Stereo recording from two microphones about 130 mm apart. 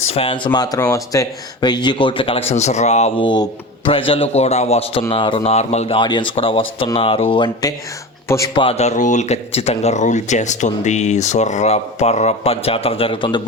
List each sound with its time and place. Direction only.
0.1 s speech: 45° left (ahead or behind)
3.2 s speech: 35° left (ahead or behind); by 6.0 s 55° left (ahead or behind)
6.0 s speech: 35° left (ahead or behind)
8.5 s speech: 50° left (ahead or behind)